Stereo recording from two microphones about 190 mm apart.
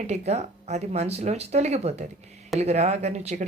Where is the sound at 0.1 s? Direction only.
35° right (ahead or behind).